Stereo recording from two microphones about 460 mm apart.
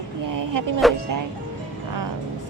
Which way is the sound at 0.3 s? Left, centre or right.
Right.